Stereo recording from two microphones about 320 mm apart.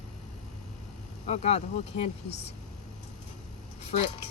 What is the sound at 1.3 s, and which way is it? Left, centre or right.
Speech, left.